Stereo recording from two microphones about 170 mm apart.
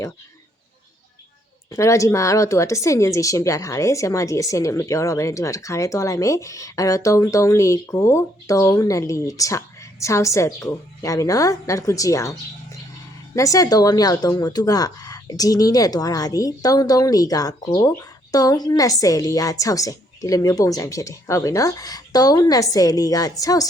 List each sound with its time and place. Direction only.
1.7 s speech: 15° left (ahead or behind)
13.3 s speech: 20° left (ahead or behind)